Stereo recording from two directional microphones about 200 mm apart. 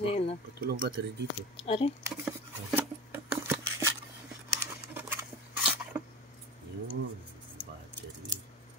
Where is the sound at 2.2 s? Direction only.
Centre (ahead or behind).